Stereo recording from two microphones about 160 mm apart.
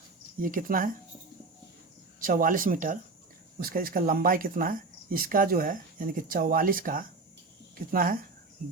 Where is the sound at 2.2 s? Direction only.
60° right (ahead or behind).